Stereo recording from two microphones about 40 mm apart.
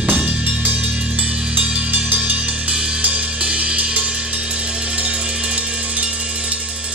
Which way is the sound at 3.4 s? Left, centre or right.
Right.